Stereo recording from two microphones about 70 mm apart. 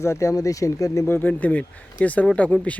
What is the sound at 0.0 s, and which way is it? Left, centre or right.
Speech, left.